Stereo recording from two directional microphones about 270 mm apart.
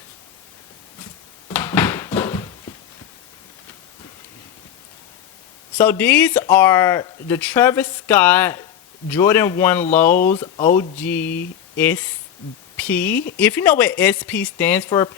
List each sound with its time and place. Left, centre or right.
1.5 s a sound: centre
5.7 s speech: centre
13.1 s speech: left
13.4 s speech: centre